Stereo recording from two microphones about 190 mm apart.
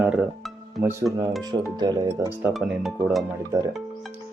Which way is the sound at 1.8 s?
20° right (ahead or behind).